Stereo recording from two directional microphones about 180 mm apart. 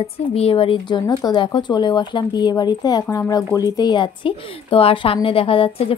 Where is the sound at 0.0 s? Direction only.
35° left (ahead or behind).